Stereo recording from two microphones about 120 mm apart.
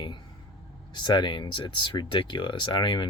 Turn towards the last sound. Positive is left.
turn(degrees=40)  # may be behind; listen again after turning